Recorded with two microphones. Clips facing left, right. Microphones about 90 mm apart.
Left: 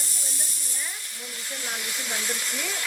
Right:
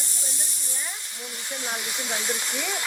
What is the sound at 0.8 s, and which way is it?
Hiss, 20° right (ahead or behind).